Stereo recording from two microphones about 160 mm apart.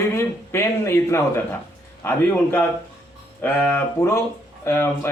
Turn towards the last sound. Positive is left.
turn(degrees=15)  # may be behind; listen again after turning